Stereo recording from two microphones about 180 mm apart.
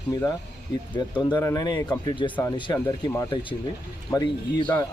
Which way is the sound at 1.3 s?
20° left (ahead or behind).